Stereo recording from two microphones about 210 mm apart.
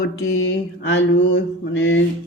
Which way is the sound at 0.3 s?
60° left (ahead or behind).